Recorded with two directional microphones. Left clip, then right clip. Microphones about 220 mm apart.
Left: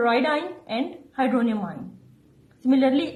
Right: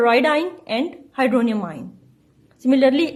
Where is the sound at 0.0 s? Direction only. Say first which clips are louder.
Right 5 dB; 35° right (ahead or behind).